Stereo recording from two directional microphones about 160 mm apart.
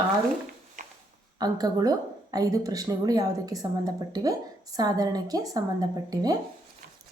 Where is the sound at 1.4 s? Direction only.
25° right (ahead or behind).